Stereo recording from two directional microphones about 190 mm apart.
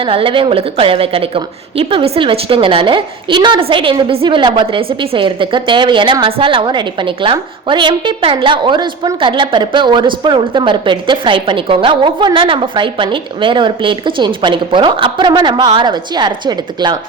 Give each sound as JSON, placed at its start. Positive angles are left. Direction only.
{"t": 0.0, "sound": "a woman's voice", "side_deg": -30}